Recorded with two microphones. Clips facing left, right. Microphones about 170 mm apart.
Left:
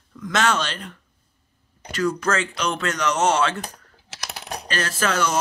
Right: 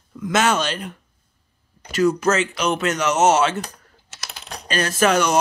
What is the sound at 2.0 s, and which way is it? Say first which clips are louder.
Speech: right 5 dB; 25° right (ahead or behind).